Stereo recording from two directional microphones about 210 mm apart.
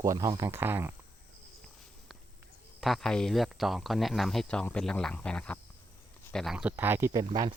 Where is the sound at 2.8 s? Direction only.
Centre (ahead or behind).